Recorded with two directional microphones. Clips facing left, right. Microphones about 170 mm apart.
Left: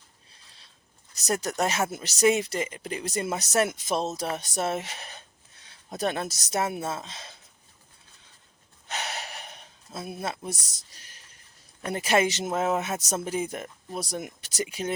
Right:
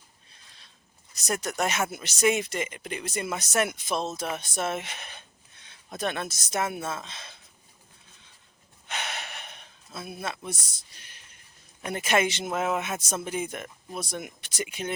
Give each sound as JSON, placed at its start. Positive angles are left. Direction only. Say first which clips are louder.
{"t": 1.1, "sound": "speech", "louder": "left 2 dB", "side_deg": 35}
{"t": 8.9, "sound": "gasp", "louder": "left 1 dB", "side_deg": 40}
{"t": 11.9, "sound": "speech", "louder": "left 1 dB", "side_deg": 35}